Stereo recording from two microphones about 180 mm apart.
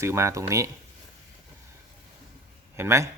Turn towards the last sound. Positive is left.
turn(degrees=-15)  # may be behind; listen again after turning